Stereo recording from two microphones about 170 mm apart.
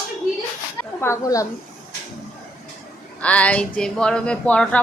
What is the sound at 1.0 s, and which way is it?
Speech, 20° left (ahead or behind).